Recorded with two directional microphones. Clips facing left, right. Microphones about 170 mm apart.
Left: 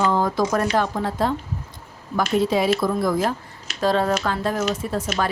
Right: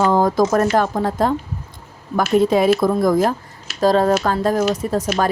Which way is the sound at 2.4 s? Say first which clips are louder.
Right 6 dB; 50° right (ahead or behind).